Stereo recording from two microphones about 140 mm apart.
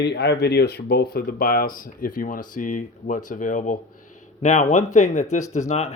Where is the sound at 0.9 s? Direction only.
90° left; by 3.8 s 70° left (ahead or behind).